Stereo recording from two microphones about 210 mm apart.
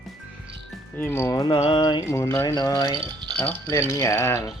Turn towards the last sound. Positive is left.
turn(degrees=10)  # may be behind; listen again after turning